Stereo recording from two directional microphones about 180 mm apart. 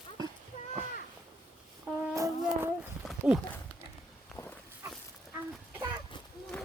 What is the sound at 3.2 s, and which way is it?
Speech, 10° right (ahead or behind).